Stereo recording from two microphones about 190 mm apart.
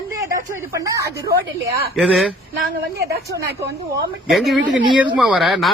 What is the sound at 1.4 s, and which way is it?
Speech, 55° right (ahead or behind).